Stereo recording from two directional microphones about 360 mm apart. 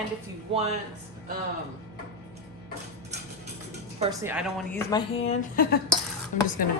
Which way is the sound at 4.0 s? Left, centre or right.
Centre.